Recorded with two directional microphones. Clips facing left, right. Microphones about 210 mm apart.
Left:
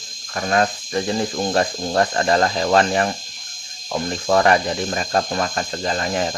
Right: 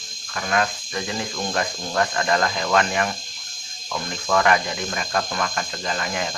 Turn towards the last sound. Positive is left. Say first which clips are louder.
# left 5 dB
turn(degrees=35)  # may be behind; listen again after turning